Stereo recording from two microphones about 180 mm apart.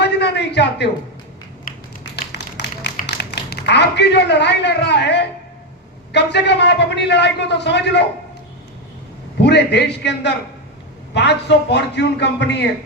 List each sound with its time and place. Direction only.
0.0 s a sound: 70° left (ahead or behind)
1.7 s tap: 50° left (ahead or behind)
2.3 s tap: 70° left (ahead or behind)
3.0 s a man's voice: 65° left (ahead or behind)
9.4 s a man's voice: 70° left (ahead or behind)